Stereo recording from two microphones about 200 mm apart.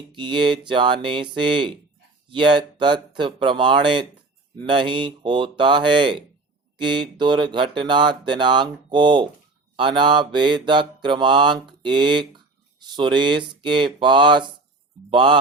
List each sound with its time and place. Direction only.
0.1 s speech: 25° right (ahead or behind)
2.3 s speech: 25° right (ahead or behind)